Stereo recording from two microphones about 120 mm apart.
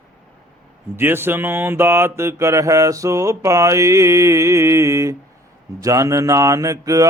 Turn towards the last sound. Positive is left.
turn(degrees=-30)  # may be behind; listen again after turning